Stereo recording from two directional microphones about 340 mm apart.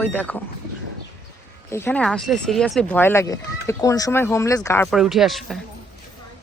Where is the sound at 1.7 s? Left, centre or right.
Centre.